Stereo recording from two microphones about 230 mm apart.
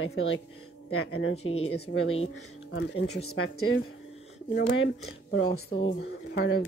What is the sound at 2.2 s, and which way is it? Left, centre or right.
Speech, left.